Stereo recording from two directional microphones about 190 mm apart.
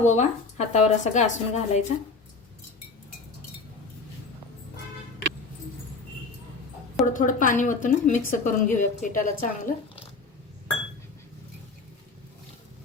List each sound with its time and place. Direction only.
0.0 s speech: 40° left (ahead or behind)
7.0 s a woman's voice: 45° left (ahead or behind)